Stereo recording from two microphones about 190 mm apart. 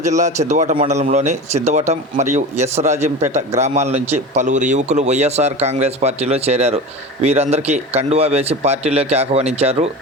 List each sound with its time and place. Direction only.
0.0 s a man's voice: 40° right (ahead or behind)